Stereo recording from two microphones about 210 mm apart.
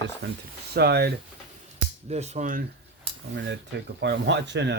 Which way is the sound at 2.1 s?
30° right (ahead or behind).